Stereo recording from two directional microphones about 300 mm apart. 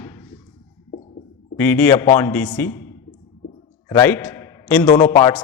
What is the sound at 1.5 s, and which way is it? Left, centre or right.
A man's voice, centre.